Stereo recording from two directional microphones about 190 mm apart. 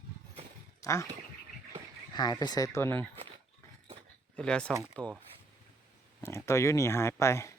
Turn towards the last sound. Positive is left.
turn(degrees=15)  # may be behind; listen again after turning